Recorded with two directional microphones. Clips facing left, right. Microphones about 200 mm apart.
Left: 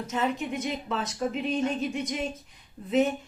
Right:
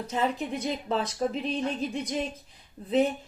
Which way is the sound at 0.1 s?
35° right (ahead or behind).